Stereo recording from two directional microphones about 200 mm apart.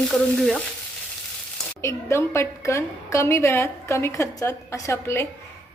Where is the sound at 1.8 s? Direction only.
15° left (ahead or behind).